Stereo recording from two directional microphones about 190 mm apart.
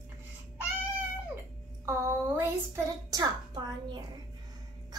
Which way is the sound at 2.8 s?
20° right (ahead or behind).